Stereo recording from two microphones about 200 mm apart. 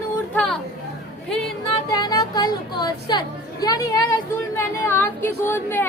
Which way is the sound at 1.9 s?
20° left (ahead or behind).